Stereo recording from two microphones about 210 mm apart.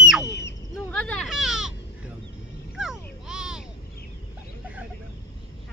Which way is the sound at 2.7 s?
5° right (ahead or behind).